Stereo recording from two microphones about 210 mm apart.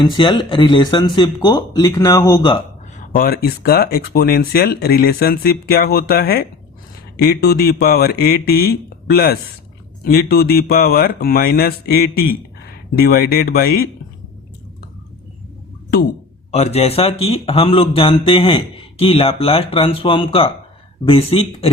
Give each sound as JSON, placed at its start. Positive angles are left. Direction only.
{"t": 0.0, "sound": "speech", "side_deg": 25}
{"t": 3.2, "sound": "speech", "side_deg": 45}
{"t": 16.5, "sound": "speech", "side_deg": 30}